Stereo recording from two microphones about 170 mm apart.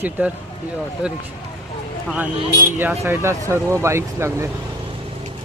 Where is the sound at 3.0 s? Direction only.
15° right (ahead or behind).